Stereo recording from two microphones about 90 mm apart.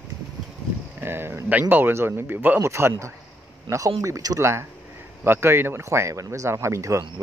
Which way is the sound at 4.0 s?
40° right (ahead or behind).